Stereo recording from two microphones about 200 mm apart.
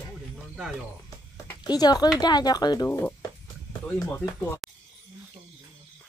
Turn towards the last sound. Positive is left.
turn(degrees=15)  # may be behind; listen again after turning